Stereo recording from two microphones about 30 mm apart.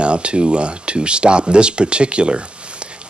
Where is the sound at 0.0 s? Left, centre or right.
Right.